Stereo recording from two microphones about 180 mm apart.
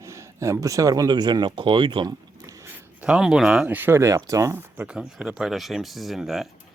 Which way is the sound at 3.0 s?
5° right (ahead or behind).